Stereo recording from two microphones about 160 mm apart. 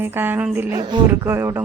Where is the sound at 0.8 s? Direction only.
25° right (ahead or behind).